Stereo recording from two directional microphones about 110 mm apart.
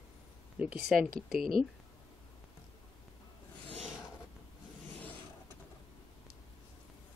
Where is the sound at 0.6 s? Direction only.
10° right (ahead or behind).